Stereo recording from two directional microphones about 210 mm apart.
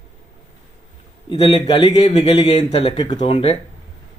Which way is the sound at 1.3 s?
30° left (ahead or behind).